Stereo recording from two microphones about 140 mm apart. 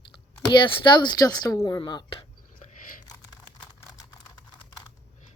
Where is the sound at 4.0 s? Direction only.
30° left (ahead or behind).